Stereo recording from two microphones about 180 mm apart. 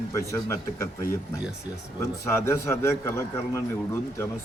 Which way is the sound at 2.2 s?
15° left (ahead or behind).